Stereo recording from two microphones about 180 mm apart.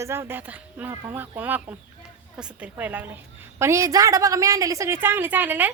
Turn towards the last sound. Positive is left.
turn(degrees=-10)  # may be behind; listen again after turning